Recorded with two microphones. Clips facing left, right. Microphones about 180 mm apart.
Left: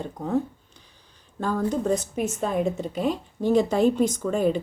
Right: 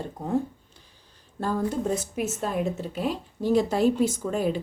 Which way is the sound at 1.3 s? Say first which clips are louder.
Left 2 dB; 5° right (ahead or behind).